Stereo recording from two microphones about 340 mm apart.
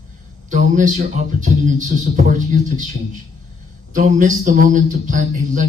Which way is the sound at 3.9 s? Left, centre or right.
Right.